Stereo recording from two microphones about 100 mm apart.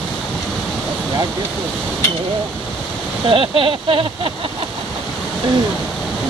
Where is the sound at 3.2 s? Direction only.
60° right (ahead or behind).